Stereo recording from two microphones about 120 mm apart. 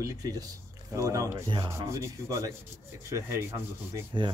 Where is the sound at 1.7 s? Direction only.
25° right (ahead or behind).